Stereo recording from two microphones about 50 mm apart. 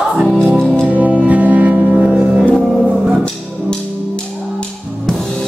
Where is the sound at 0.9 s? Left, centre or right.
Right.